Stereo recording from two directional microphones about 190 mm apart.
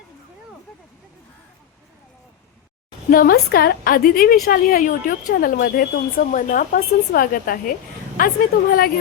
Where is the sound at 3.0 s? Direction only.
50° left (ahead or behind).